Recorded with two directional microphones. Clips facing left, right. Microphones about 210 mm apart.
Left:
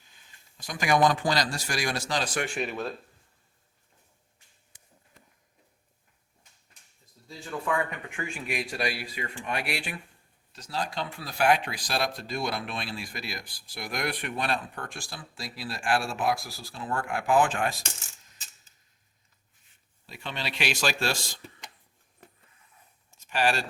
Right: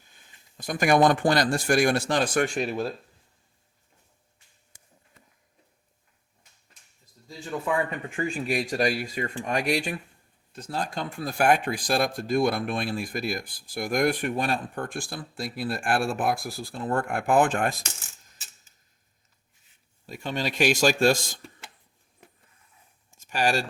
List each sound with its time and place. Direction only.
0.5 s speech: 55° right (ahead or behind)
2.6 s speech: 35° right (ahead or behind)
7.3 s speech: 20° right (ahead or behind); by 10.0 s 40° right (ahead or behind)
10.5 s speech: 50° right (ahead or behind)
20.1 s speech: 45° right (ahead or behind)
23.1 s a sound: 45° right (ahead or behind)